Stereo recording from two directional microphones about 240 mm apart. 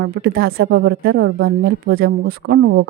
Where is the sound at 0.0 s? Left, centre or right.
Right.